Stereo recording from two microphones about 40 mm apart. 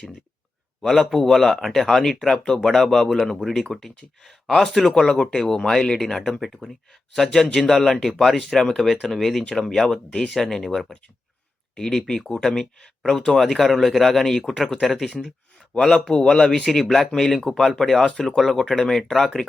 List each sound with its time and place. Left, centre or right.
0.8 s a man's voice: centre
5.1 s a man's voice: left; by 6.7 s centre
7.7 s a man's voice: centre
18.1 s a man's voice: centre
18.3 s speech: centre